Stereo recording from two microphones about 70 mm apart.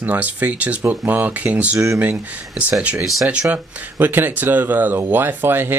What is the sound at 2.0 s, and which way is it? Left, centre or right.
Speech, right.